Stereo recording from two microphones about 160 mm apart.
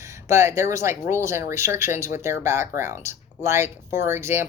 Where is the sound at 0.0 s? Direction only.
15° right (ahead or behind).